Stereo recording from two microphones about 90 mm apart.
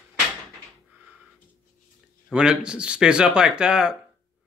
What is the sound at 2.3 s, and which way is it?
Speech, 10° right (ahead or behind).